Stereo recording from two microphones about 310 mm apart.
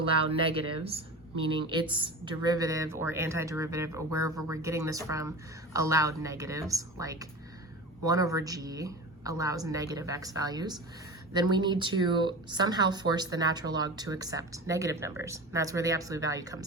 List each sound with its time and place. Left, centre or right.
0.0 s speech: centre